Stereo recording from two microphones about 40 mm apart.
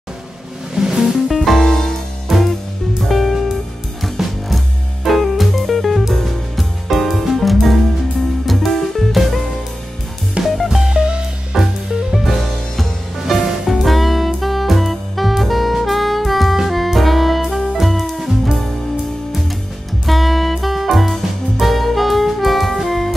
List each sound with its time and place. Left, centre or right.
0.7 s music: centre
1.4 s music: centre
2.2 s music: centre
10.4 s music: centre
10.9 s music: right
11.5 s music: centre
20.1 s music: centre